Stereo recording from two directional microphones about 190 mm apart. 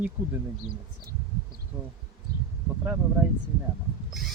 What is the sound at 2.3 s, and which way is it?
Bee, 50° right (ahead or behind).